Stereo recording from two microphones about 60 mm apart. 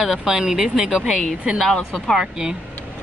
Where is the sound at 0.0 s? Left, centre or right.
Centre.